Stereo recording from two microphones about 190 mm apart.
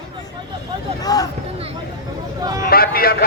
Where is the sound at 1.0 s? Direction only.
20° left (ahead or behind).